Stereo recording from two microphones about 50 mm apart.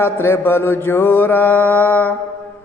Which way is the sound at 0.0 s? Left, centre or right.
Left.